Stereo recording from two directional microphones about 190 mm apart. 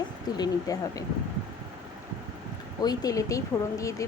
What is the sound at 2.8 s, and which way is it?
Speech, 20° left (ahead or behind).